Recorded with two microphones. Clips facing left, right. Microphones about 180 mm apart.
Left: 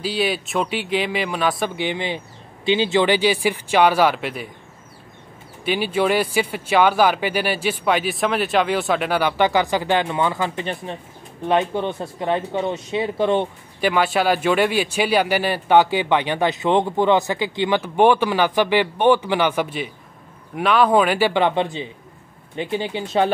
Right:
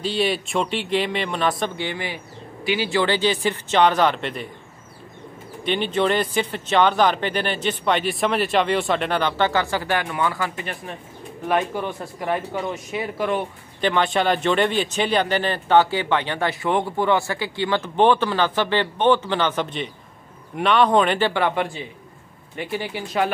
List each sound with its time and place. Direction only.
0.0 s a man's voice: centre (ahead or behind)
1.8 s speech: 20° left (ahead or behind)
5.6 s speech: 5° left (ahead or behind); by 13.5 s 25° left (ahead or behind)
13.7 s a man's voice: 5° left (ahead or behind)
21.3 s speech: 20° left (ahead or behind)